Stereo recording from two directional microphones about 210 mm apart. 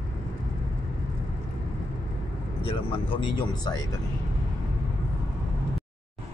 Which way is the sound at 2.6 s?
25° left (ahead or behind).